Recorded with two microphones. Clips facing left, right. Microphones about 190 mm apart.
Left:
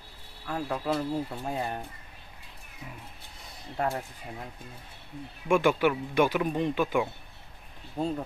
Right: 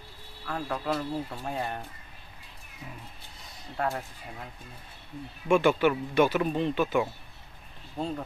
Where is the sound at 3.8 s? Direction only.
15° left (ahead or behind).